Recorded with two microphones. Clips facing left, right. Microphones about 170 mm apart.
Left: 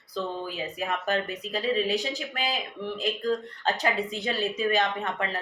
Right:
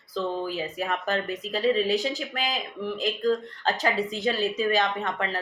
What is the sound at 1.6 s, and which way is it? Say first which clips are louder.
Speech: right 4 dB; 40° right (ahead or behind).